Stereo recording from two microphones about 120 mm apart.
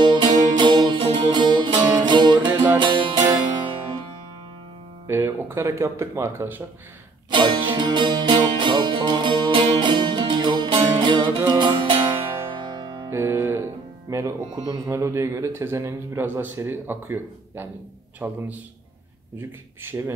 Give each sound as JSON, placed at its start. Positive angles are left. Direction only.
{"t": 0.0, "sound": "music", "side_deg": -40}
{"t": 5.0, "sound": "speech", "side_deg": -20}
{"t": 7.2, "sound": "music", "side_deg": -40}
{"t": 13.1, "sound": "music", "side_deg": -20}
{"t": 14.1, "sound": "a man's voice", "side_deg": -25}